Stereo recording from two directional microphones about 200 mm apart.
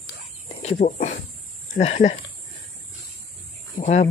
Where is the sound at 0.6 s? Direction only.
35° left (ahead or behind).